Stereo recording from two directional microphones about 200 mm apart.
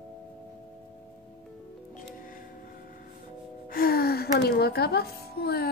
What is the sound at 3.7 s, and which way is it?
Music, 50° left (ahead or behind).